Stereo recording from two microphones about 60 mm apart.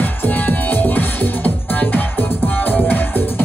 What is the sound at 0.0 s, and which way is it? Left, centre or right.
Music, left.